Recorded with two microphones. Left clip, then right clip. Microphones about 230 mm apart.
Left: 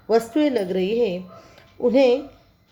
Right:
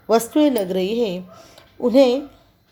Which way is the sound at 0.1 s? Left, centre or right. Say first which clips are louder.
Right 3 dB; right.